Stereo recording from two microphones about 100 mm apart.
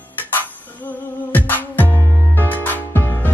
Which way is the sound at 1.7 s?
20° left (ahead or behind).